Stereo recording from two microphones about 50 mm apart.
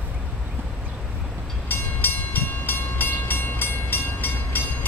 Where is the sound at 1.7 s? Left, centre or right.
Left.